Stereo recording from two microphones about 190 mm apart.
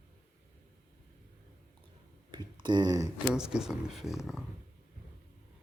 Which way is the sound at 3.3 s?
5° right (ahead or behind).